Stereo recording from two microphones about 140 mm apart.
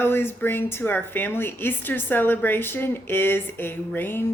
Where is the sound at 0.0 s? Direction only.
15° left (ahead or behind).